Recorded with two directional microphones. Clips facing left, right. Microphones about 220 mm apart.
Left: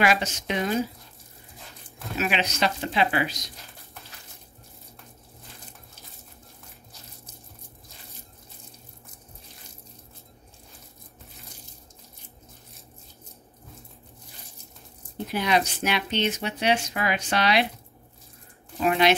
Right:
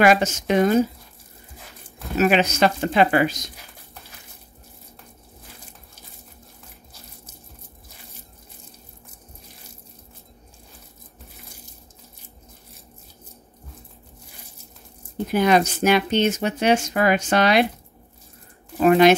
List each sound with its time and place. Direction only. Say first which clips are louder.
0.0 s speech: right 7 dB; 45° right (ahead or behind)
2.1 s speech: right 9 dB; 45° right (ahead or behind)
15.3 s speech: right 7 dB; 45° right (ahead or behind)
18.8 s speech: right 8 dB; 45° right (ahead or behind)